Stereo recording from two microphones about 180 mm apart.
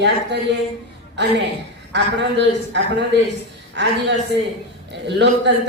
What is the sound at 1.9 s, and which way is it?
A man's voice, 75° right (ahead or behind).